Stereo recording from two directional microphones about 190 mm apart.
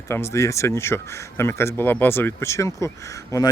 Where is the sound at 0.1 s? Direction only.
15° left (ahead or behind).